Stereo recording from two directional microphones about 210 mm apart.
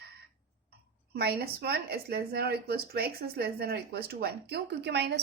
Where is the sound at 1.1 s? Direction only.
50° right (ahead or behind).